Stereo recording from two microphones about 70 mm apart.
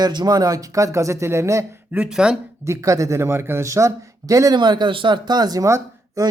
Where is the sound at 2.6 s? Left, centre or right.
Right.